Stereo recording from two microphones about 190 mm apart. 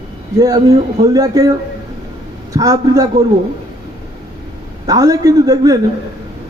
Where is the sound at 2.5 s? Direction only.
20° right (ahead or behind).